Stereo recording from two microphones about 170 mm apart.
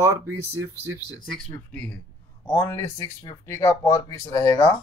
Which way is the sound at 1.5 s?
10° left (ahead or behind).